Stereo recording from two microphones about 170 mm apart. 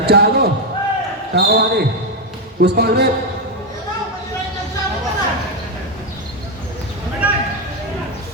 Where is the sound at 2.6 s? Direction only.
70° right (ahead or behind).